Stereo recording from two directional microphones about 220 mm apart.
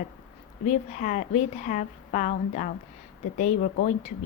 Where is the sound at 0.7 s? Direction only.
35° left (ahead or behind).